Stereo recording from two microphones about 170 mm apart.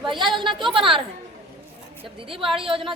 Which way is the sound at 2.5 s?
30° right (ahead or behind).